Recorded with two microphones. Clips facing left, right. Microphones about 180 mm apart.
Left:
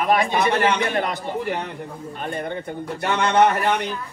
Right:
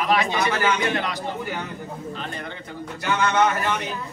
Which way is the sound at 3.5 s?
65° left (ahead or behind).